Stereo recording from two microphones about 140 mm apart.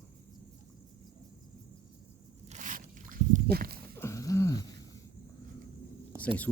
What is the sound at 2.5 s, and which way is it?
Crunch, 65° right (ahead or behind).